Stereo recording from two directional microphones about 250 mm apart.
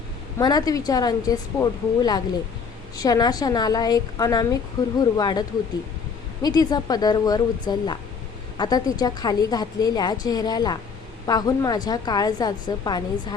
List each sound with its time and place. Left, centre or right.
0.3 s a woman's voice: centre